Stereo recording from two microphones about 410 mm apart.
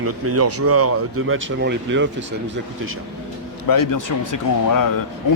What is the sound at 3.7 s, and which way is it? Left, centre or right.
Speech, left.